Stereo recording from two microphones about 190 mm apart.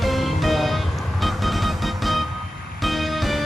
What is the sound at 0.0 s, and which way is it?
Music, centre (ahead or behind).